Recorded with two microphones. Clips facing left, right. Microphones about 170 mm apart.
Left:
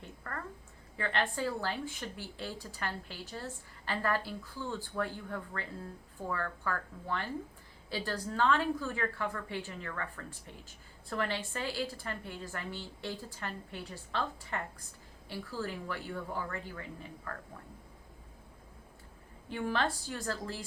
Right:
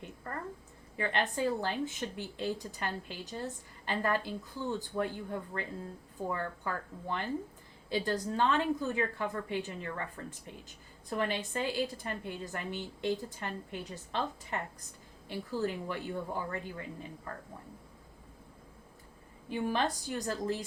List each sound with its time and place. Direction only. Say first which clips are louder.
0.0 s a sound: right 2 dB; 20° right (ahead or behind)
0.9 s a woman's voice: right 1 dB; 20° right (ahead or behind)
19.5 s a woman's voice: right 1 dB; 15° right (ahead or behind)